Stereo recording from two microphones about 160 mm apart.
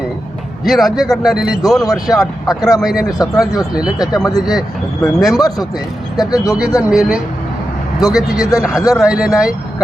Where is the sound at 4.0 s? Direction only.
25° left (ahead or behind).